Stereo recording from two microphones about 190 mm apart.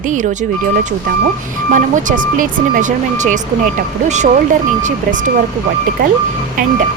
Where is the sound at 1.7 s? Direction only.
45° right (ahead or behind).